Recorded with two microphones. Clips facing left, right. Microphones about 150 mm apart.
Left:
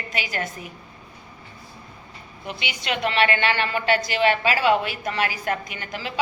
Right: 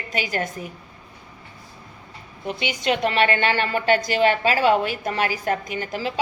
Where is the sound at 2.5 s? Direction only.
40° right (ahead or behind).